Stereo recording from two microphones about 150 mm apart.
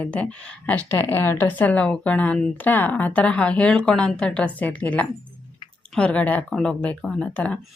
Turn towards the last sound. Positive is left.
turn(degrees=5)  # may be behind; listen again after turning